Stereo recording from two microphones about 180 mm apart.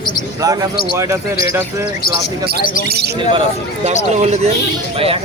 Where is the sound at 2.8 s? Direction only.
65° right (ahead or behind).